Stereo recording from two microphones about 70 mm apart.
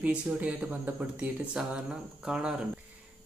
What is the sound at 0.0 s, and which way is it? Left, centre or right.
Speech, centre.